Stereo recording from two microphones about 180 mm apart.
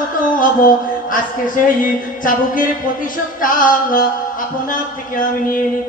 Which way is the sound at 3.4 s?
50° left (ahead or behind).